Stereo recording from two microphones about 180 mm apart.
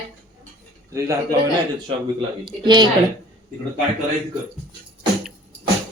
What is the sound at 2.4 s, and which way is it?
Speech, 25° right (ahead or behind).